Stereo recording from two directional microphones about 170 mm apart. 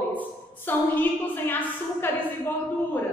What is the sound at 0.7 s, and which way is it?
A woman's voice, 10° left (ahead or behind).